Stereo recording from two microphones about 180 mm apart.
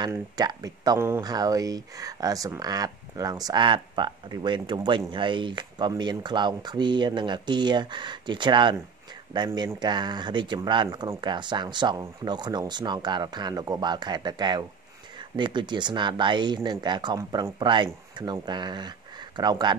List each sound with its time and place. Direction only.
0.0 s speech: 20° right (ahead or behind)
9.5 s speech: 15° right (ahead or behind)
9.8 s speech: 25° right (ahead or behind)